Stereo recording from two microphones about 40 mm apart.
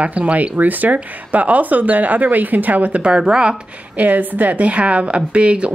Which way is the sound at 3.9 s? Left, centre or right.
Right.